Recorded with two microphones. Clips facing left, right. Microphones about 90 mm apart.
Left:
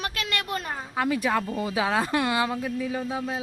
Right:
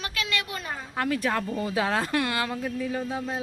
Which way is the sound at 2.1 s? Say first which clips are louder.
Left 2 dB; 15° left (ahead or behind).